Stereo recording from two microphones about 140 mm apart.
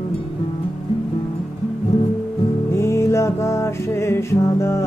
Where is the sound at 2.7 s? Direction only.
20° left (ahead or behind).